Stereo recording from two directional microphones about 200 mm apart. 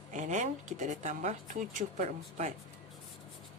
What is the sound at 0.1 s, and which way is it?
Speech, 40° right (ahead or behind).